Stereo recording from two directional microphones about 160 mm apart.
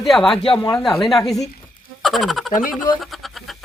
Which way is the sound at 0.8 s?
Centre (ahead or behind).